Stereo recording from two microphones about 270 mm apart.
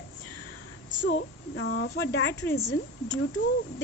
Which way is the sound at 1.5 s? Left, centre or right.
Left.